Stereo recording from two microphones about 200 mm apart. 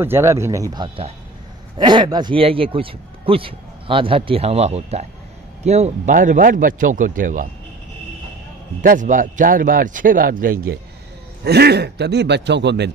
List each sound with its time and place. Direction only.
0.0 s speech: 15° right (ahead or behind); by 7.4 s 40° right (ahead or behind)
8.8 s a man's voice: 40° right (ahead or behind); by 12.9 s 60° right (ahead or behind)